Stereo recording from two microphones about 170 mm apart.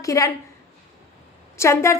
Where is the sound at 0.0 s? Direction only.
20° left (ahead or behind).